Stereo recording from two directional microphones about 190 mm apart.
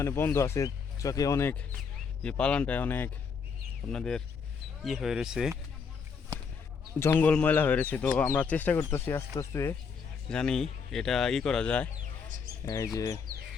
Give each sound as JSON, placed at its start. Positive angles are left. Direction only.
{"t": 0.0, "sound": "speech", "side_deg": 15}
{"t": 7.0, "sound": "speech", "side_deg": 10}
{"t": 10.2, "sound": "speech", "side_deg": 5}
{"t": 12.6, "sound": "speech", "side_deg": 15}